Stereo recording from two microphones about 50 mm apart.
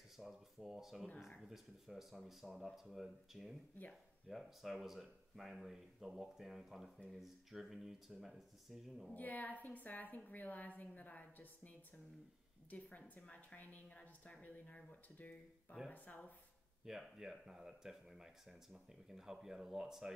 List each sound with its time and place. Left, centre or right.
0.2 s speech: centre
9.1 s a woman's voice: left
16.8 s speech: centre